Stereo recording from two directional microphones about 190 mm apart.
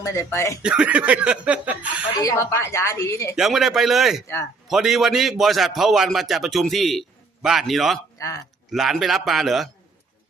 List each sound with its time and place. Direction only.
0.0 s a woman's voice: 15° left (ahead or behind)
0.6 s speech: 5° right (ahead or behind)
2.2 s a woman's voice: 15° left (ahead or behind)
3.3 s a man's voice: centre (ahead or behind)